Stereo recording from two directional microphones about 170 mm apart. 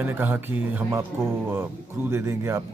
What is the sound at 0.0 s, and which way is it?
A man's voice, 10° right (ahead or behind).